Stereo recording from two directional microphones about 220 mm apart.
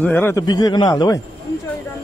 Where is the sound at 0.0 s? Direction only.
10° left (ahead or behind).